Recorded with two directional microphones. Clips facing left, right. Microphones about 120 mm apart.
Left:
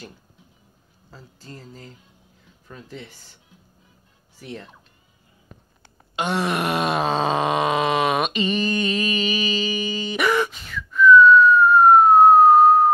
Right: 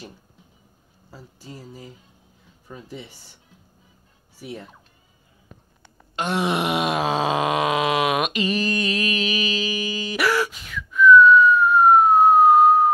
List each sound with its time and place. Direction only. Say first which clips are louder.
1.1 s speech: right 1 dB; 10° right (ahead or behind)
4.4 s speech: right 1 dB; 10° right (ahead or behind)
6.1 s groan: left 1 dB; centre (ahead or behind)
6.4 s wail: right 2 dB; 15° right (ahead or behind)
6.9 s a sound: left 1 dB; 5° right (ahead or behind)